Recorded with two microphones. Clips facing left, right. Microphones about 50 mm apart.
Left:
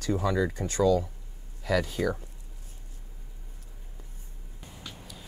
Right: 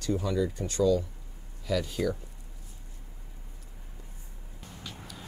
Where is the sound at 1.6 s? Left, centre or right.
Left.